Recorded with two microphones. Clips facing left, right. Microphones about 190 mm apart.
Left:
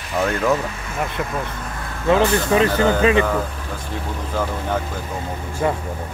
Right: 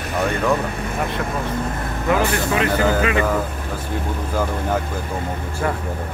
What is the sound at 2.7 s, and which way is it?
Speech, 5° right (ahead or behind).